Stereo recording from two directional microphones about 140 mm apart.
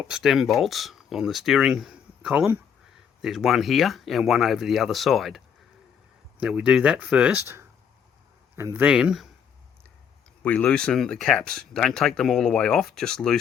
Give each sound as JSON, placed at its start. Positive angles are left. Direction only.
{"t": 0.1, "sound": "speech", "side_deg": 0}
{"t": 6.4, "sound": "speech", "side_deg": -5}
{"t": 8.8, "sound": "speech", "side_deg": -5}
{"t": 10.4, "sound": "speech", "side_deg": 10}